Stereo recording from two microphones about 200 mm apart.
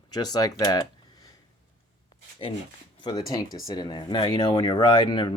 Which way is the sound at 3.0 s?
20° left (ahead or behind).